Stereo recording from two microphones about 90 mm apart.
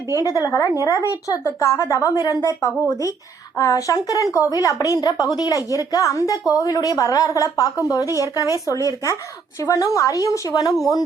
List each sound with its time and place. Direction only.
0.2 s a woman's voice: 40° left (ahead or behind)